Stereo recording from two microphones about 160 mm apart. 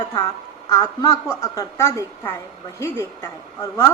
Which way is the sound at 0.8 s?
20° left (ahead or behind).